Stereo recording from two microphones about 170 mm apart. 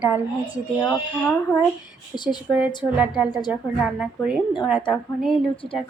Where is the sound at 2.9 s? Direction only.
5° right (ahead or behind).